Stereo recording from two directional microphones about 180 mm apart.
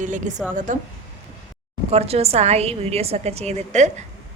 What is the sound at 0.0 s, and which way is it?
Speech, 45° right (ahead or behind).